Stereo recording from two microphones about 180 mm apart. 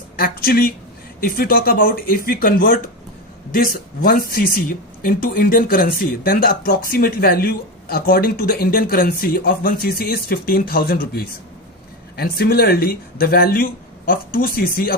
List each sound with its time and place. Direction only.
0.2 s speech: 55° left (ahead or behind)